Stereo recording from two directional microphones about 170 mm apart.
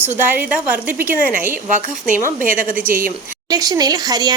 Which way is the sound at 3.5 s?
20° right (ahead or behind).